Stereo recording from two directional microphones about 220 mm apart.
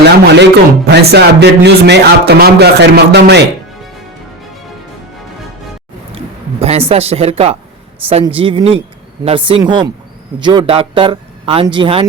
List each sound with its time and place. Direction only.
0.0 s a man's voice: 50° right (ahead or behind)
6.6 s speech: 25° right (ahead or behind)